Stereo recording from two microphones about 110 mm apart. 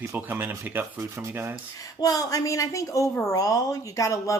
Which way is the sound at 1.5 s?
35° left (ahead or behind).